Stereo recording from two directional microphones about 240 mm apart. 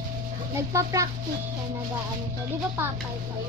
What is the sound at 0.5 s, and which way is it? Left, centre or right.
Speech, centre.